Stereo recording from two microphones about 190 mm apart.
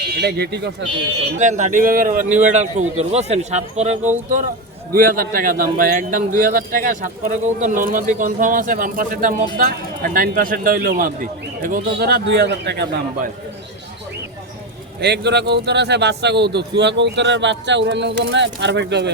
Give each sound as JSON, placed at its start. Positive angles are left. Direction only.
{"t": 0.2, "sound": "a man's voice", "side_deg": -60}
{"t": 1.4, "sound": "a man's voice", "side_deg": -40}
{"t": 4.9, "sound": "speech", "side_deg": -45}
{"t": 15.0, "sound": "a man's voice", "side_deg": -60}